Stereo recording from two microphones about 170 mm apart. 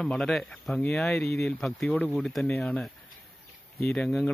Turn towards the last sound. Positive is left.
turn(degrees=5)  # may be behind; listen again after turning